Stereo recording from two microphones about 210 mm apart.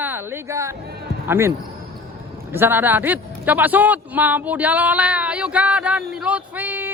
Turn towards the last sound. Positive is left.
turn(degrees=-10)  # may be behind; listen again after turning